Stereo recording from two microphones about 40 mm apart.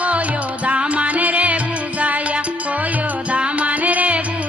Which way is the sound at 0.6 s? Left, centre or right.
Right.